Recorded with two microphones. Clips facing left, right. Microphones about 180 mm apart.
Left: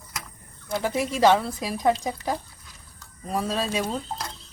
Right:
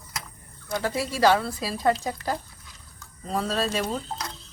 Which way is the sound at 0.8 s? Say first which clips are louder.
Left 2 dB; 20° left (ahead or behind).